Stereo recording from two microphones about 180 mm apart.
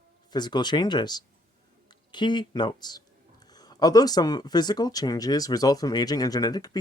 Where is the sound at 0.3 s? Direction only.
25° left (ahead or behind).